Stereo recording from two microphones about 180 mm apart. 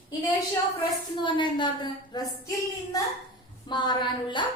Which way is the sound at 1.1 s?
25° left (ahead or behind).